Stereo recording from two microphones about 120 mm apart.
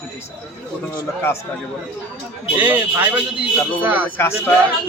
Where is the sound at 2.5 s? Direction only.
15° right (ahead or behind).